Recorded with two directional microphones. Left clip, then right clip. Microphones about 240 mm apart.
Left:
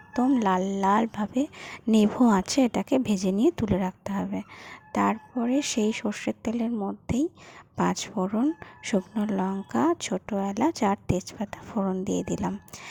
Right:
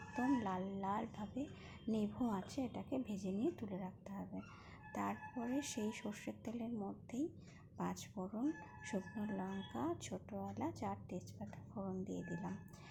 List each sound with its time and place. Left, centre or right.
0.1 s speech: left